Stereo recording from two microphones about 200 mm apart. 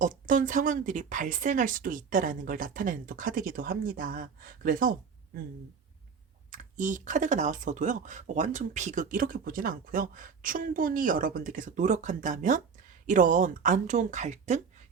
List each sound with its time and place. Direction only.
0.0 s speech: 40° right (ahead or behind)
6.5 s speech: 40° right (ahead or behind)